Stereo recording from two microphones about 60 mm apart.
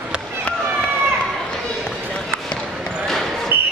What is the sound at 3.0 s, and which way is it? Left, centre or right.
Basketball bounce, centre.